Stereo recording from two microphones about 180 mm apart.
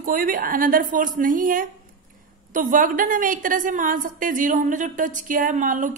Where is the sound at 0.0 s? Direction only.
50° right (ahead or behind).